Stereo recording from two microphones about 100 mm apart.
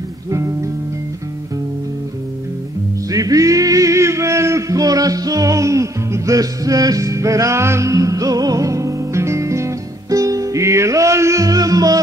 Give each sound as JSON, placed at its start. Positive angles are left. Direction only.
{"t": 0.3, "sound": "music", "side_deg": -30}
{"t": 3.1, "sound": "music", "side_deg": -35}